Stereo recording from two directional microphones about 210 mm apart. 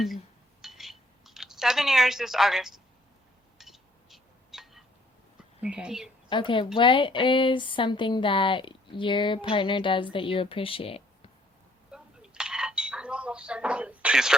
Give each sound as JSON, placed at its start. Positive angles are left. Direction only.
{"t": 0.6, "sound": "a sound", "side_deg": 0}
{"t": 3.6, "sound": "chink", "side_deg": 0}
{"t": 5.5, "sound": "speech", "side_deg": -5}
{"t": 6.2, "sound": "speech", "side_deg": 25}
{"t": 11.9, "sound": "dishes", "side_deg": -5}